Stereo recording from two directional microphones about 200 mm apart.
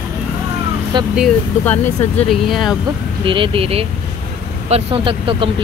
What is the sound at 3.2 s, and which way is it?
Speech, 25° right (ahead or behind).